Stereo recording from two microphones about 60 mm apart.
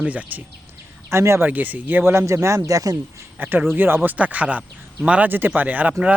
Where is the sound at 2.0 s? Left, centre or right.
Right.